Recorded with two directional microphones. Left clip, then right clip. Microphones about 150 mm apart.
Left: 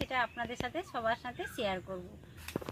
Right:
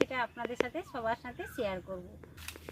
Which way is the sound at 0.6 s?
20° right (ahead or behind).